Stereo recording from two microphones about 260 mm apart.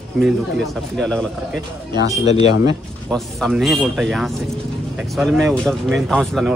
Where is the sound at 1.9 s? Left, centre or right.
Centre.